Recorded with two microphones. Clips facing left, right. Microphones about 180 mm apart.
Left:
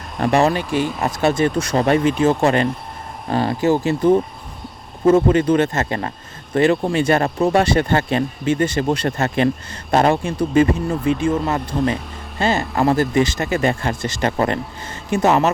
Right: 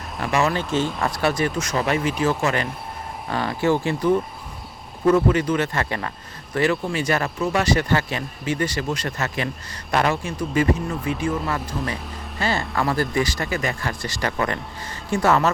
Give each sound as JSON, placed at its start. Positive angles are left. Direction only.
{"t": 0.3, "sound": "speech", "side_deg": 35}
{"t": 0.5, "sound": "speech", "side_deg": 15}
{"t": 3.8, "sound": "speech", "side_deg": 25}